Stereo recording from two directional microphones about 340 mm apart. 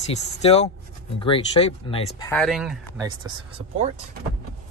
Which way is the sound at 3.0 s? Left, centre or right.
Centre.